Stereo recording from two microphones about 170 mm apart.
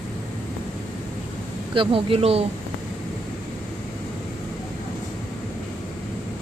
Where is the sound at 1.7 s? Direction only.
30° right (ahead or behind).